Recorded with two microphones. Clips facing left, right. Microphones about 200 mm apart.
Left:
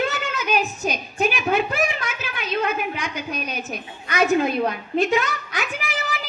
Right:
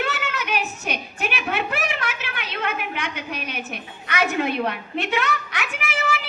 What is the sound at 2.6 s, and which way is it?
A woman's voice, 65° right (ahead or behind).